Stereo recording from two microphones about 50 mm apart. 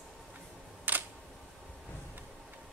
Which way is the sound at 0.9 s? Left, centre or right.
Right.